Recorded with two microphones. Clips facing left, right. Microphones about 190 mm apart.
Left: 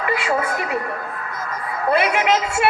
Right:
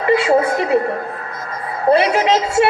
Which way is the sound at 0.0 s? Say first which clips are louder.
Right 8 dB; 30° right (ahead or behind).